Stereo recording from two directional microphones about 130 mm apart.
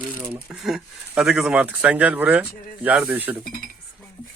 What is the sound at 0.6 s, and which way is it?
Speech, 5° right (ahead or behind).